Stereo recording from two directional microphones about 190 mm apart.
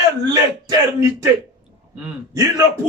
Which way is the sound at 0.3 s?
20° right (ahead or behind).